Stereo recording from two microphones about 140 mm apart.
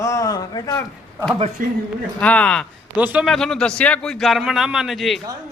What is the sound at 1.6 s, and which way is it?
Speech, 90° right.